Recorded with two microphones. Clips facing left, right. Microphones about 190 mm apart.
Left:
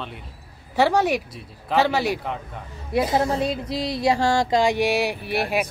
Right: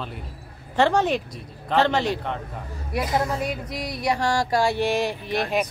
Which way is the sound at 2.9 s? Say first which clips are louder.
Left 4 dB; 25° left (ahead or behind).